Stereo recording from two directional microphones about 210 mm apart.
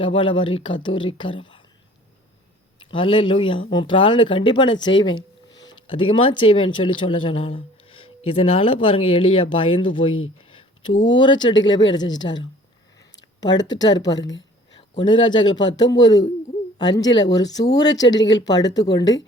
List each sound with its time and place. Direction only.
0.0 s speech: 25° left (ahead or behind)
2.7 s speech: 25° left (ahead or behind)
10.5 s a sound: 25° left (ahead or behind)
11.0 s speech: 20° left (ahead or behind)
13.7 s speech: 20° left (ahead or behind)